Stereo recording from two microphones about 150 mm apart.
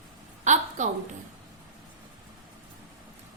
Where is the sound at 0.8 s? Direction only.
55° right (ahead or behind).